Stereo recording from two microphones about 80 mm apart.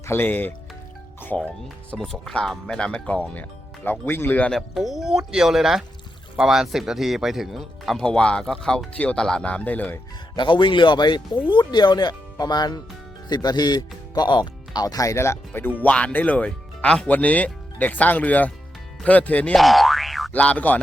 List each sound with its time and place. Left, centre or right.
0.0 s speech: left
2.0 s speech: centre
4.0 s speech: left
4.7 s speech: centre; by 10.0 s left
10.3 s a man's voice: left
15.8 s speech: centre
19.5 s boing: centre
20.3 s speech: centre